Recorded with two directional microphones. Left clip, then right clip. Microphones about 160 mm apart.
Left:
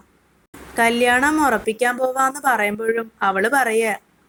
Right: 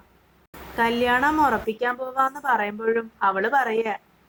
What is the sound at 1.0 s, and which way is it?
A woman's voice, 20° left (ahead or behind).